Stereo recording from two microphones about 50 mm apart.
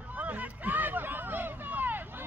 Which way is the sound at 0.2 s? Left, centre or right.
Right.